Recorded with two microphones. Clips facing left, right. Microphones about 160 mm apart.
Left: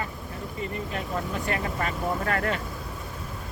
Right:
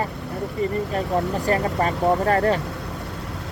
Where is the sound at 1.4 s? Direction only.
35° right (ahead or behind).